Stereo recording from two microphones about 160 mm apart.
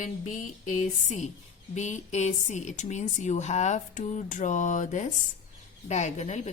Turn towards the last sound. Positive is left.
turn(degrees=45)  # may be behind; listen again after turning